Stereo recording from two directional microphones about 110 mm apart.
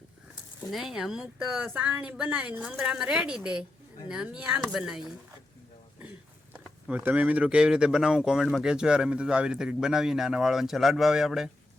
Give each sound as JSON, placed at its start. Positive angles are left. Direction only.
{"t": 0.7, "sound": "a woman's voice", "side_deg": 0}
{"t": 7.0, "sound": "speech", "side_deg": -15}